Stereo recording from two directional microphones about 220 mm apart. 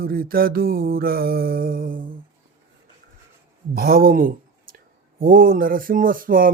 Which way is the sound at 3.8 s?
40° right (ahead or behind).